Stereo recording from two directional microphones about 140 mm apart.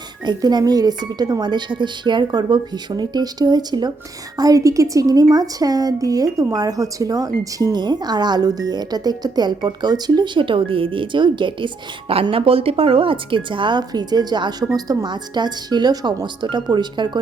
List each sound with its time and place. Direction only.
0.3 s speech: 30° right (ahead or behind)